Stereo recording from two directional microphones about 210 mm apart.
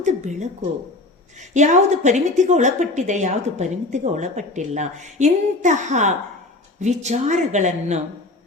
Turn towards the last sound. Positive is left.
turn(degrees=-35)  # may be behind; listen again after turning